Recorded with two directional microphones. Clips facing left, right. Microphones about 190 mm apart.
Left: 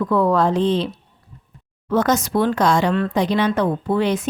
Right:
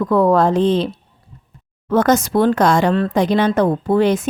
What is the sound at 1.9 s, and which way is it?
Speech, 50° right (ahead or behind).